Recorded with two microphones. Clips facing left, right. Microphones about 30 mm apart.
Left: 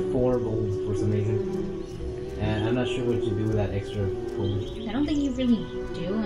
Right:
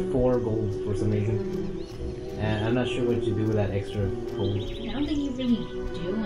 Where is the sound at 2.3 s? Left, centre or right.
Right.